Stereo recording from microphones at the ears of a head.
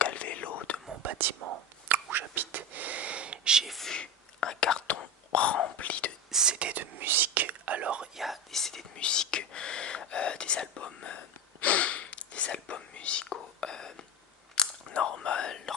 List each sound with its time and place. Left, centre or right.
0.0 s whispering: left
0.9 s whispering: right
3.9 s whispering: left
6.3 s whispering: right
8.5 s whispering: left
14.5 s biting: left